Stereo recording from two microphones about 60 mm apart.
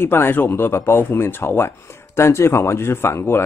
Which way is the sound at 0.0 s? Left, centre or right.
Left.